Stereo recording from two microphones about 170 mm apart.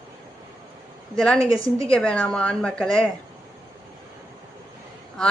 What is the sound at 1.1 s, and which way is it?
A woman's voice, 5° left (ahead or behind).